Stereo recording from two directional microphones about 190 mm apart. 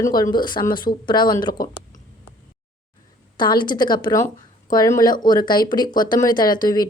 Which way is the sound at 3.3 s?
25° left (ahead or behind).